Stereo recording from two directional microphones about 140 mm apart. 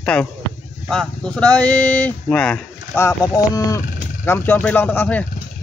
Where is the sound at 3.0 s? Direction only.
20° left (ahead or behind).